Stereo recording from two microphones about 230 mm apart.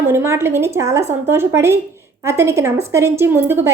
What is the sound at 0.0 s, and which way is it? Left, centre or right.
Speech, centre.